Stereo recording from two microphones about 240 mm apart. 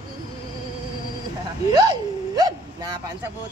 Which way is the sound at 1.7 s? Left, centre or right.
Centre.